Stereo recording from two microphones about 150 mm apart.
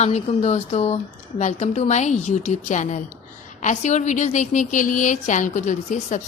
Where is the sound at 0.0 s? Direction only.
45° left (ahead or behind).